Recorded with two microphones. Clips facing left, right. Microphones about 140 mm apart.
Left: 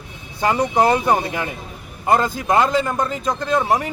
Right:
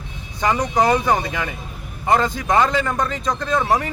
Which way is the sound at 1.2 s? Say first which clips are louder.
Left 1 dB; 25° left (ahead or behind).